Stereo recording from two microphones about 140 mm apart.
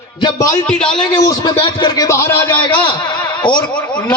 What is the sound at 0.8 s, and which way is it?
A man's voice, 35° left (ahead or behind).